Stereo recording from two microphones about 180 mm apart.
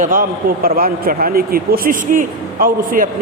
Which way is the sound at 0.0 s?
50° right (ahead or behind).